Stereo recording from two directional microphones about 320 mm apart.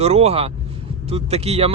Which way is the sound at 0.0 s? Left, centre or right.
Centre.